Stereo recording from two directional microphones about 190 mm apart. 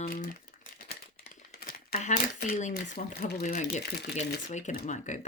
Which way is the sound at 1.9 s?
40° left (ahead or behind).